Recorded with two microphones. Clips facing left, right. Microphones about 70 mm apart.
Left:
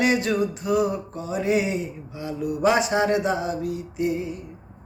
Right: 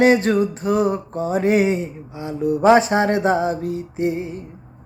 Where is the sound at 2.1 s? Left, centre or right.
Right.